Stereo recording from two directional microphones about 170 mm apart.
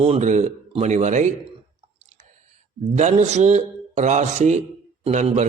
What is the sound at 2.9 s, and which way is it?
A man's voice, 45° right (ahead or behind).